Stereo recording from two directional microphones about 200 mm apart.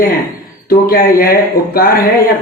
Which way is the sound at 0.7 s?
50° left (ahead or behind).